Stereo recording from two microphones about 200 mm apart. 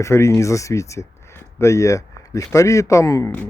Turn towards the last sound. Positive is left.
turn(degrees=15)  # may be behind; listen again after turning